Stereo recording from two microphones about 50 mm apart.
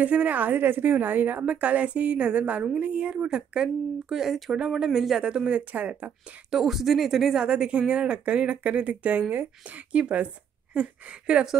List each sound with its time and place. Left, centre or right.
0.0 s a woman's voice: right
1.4 s speech: right; by 5.2 s centre
5.2 s speech: right
6.5 s speech: centre
7.4 s a woman's voice: centre